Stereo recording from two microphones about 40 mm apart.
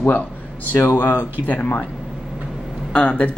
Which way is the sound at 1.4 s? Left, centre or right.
Left.